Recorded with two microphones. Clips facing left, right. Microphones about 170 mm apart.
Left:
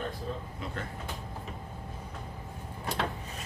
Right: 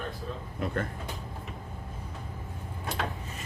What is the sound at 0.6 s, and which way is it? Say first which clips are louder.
Speech: right 11 dB; 50° right (ahead or behind).